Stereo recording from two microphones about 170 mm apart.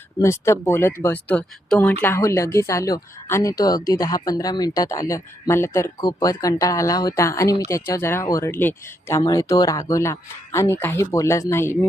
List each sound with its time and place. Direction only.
0.2 s speech: 15° left (ahead or behind)